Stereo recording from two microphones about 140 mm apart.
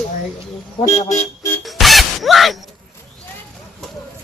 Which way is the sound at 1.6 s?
Centre (ahead or behind).